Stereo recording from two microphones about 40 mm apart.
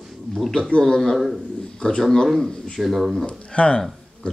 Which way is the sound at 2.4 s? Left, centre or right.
Centre.